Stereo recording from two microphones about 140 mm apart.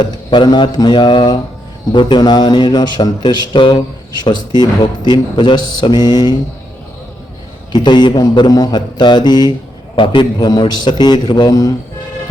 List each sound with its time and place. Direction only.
0.0 s speech: 35° left (ahead or behind)
7.7 s speech: 35° left (ahead or behind)